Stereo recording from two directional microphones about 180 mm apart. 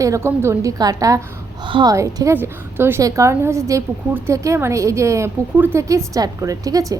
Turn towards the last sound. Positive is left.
turn(degrees=-20)  # may be behind; listen again after turning